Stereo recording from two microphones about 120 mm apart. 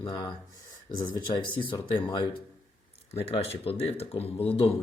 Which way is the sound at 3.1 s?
55° left (ahead or behind).